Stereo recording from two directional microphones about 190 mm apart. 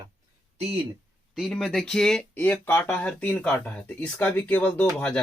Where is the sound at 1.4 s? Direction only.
Centre (ahead or behind).